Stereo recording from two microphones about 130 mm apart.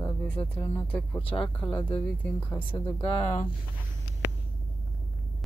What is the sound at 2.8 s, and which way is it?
Speech, 10° left (ahead or behind).